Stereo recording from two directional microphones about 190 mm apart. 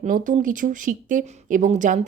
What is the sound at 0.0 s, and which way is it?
A woman's voice, 40° right (ahead or behind).